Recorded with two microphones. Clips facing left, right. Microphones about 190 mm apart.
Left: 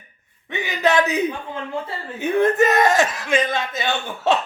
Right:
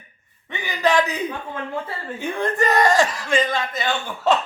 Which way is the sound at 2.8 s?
20° left (ahead or behind).